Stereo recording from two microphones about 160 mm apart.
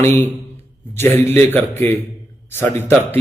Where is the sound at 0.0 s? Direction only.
15° left (ahead or behind).